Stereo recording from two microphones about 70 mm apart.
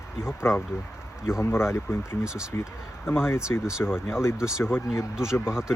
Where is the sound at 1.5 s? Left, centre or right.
Left.